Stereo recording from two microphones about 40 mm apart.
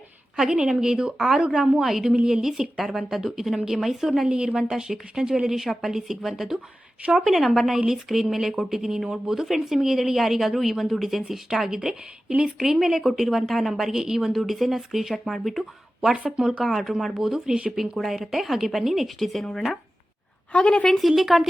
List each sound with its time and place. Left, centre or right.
0.4 s a woman's voice: right
4.3 s a woman's voice: centre
16.1 s speech: right
16.6 s speech: centre
20.5 s a woman's voice: left
21.1 s speech: centre